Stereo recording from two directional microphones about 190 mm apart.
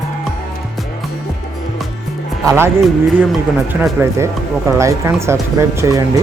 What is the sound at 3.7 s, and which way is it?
Speech, 5° right (ahead or behind).